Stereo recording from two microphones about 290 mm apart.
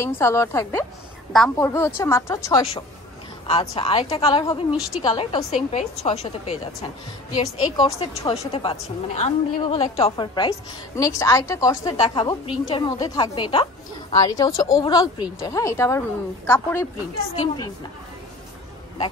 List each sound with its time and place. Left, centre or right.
0.0 s a woman's voice: centre